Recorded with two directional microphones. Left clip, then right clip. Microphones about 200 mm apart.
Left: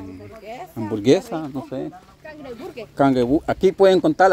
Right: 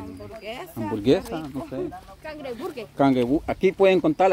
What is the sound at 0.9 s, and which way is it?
Speech, 15° left (ahead or behind).